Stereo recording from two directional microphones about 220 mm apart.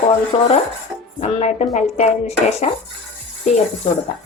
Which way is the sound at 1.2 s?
30° left (ahead or behind).